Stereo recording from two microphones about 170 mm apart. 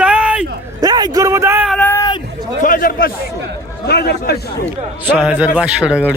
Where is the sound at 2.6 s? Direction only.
55° left (ahead or behind).